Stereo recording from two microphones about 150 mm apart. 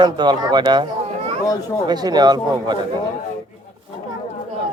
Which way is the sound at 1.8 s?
25° right (ahead or behind).